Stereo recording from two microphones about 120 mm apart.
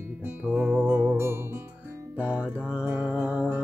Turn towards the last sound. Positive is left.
turn(degrees=-10)  # may be behind; listen again after turning